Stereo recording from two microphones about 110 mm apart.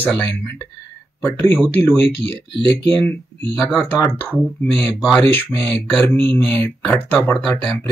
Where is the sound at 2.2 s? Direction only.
55° right (ahead or behind).